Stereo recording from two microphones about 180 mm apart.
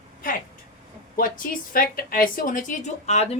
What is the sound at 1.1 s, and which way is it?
A woman's voice, 50° left (ahead or behind).